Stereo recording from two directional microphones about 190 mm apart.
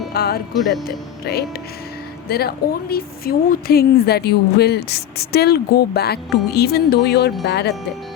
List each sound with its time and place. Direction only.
0.1 s music: 55° left (ahead or behind)
0.9 s a woman's voice: 55° left (ahead or behind)